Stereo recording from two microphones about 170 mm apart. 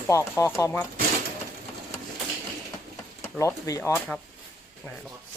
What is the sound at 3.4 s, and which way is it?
Speech, 20° left (ahead or behind).